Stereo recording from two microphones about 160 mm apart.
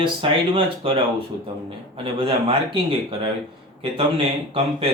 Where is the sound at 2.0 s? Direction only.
35° right (ahead or behind).